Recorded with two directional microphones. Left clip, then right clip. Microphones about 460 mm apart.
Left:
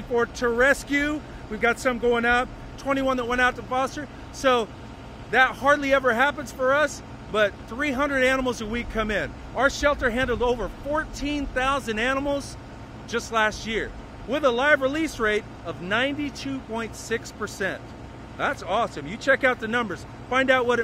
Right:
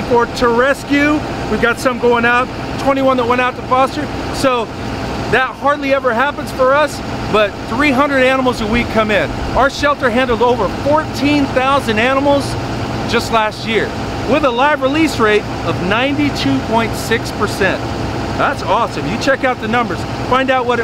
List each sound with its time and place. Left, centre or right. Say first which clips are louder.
0.2 s speech: right 9 dB; left